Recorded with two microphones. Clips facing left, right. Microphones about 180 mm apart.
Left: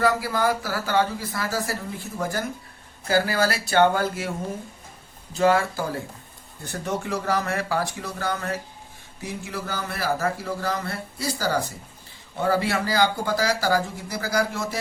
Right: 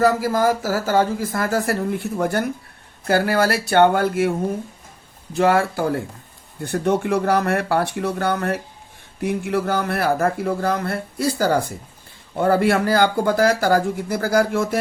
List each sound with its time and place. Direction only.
0.0 s speech: 45° right (ahead or behind)